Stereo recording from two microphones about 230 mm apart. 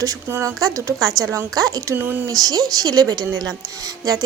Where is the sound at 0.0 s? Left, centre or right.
Centre.